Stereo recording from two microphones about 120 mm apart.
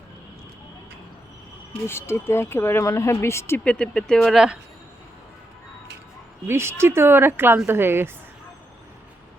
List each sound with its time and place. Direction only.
1.9 s speech: 20° left (ahead or behind)
3.6 s speech: 10° left (ahead or behind)
6.5 s speech: 20° right (ahead or behind)